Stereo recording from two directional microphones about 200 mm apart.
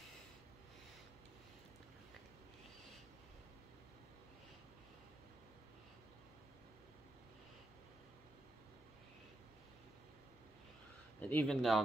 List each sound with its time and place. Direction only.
11.1 s speech: 10° left (ahead or behind)